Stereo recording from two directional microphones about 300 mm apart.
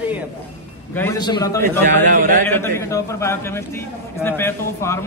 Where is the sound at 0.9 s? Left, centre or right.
Centre.